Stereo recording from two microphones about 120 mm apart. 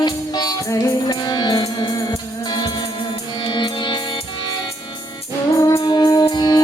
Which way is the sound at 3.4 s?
40° left (ahead or behind).